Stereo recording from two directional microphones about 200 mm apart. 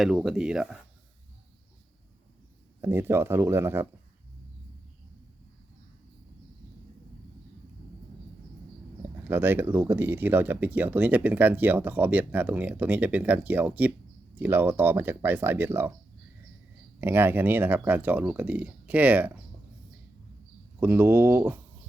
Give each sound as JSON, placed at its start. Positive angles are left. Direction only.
{"t": 0.0, "sound": "speech", "side_deg": 0}
{"t": 2.8, "sound": "speech", "side_deg": -10}
{"t": 9.2, "sound": "speech", "side_deg": -10}
{"t": 17.0, "sound": "speech", "side_deg": -10}
{"t": 20.7, "sound": "speech", "side_deg": -10}